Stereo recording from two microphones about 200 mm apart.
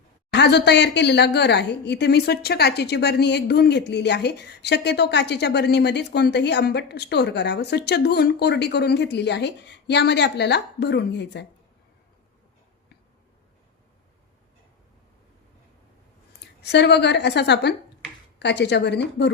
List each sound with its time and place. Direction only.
0.3 s a woman's voice: 55° left (ahead or behind)
16.6 s a woman's voice: 60° left (ahead or behind)